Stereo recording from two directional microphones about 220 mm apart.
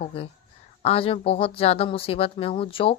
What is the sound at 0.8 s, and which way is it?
A woman's voice, 25° left (ahead or behind).